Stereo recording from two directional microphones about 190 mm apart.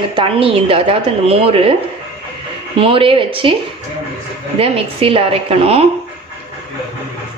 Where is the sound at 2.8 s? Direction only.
30° right (ahead or behind).